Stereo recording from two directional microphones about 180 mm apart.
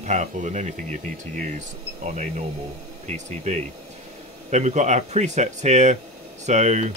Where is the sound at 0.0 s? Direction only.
40° right (ahead or behind).